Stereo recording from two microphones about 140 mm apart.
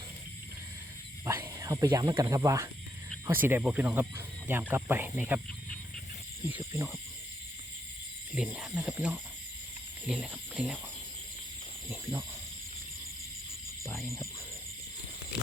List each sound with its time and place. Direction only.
1.2 s speech: 20° right (ahead or behind)
6.6 s speech: 20° right (ahead or behind)
8.4 s speech: 5° right (ahead or behind)
14.0 s speech: 20° right (ahead or behind)